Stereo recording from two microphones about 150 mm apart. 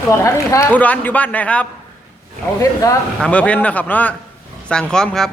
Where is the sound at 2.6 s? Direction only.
20° left (ahead or behind).